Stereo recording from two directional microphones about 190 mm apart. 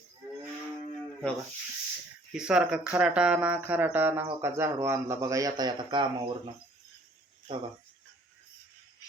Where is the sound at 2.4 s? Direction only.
5° right (ahead or behind); by 6.0 s 25° right (ahead or behind).